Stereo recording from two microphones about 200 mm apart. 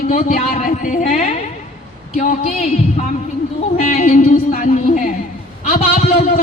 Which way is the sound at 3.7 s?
40° left (ahead or behind).